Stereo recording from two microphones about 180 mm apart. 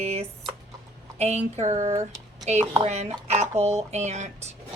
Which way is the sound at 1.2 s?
40° right (ahead or behind).